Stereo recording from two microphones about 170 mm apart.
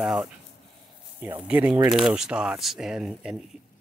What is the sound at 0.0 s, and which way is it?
Speech, 5° right (ahead or behind).